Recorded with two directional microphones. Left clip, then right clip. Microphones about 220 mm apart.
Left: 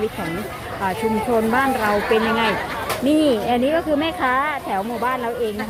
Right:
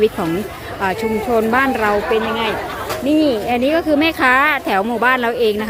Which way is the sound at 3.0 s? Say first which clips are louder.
Right 2 dB; 5° right (ahead or behind).